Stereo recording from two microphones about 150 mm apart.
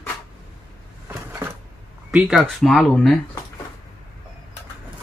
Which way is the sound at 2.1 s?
Centre (ahead or behind).